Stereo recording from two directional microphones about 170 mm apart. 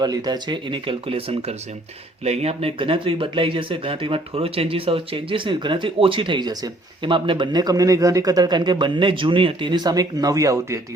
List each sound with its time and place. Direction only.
0.0 s speech: 25° right (ahead or behind)